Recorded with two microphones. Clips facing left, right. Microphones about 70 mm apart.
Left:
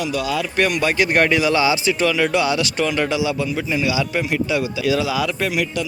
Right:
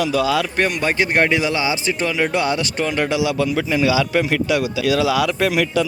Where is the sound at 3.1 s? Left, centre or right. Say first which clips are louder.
Right 2 dB; right.